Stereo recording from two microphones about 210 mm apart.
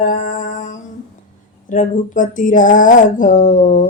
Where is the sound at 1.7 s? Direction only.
40° left (ahead or behind).